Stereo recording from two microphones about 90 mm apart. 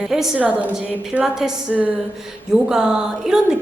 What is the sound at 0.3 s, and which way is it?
Speech, 15° right (ahead or behind).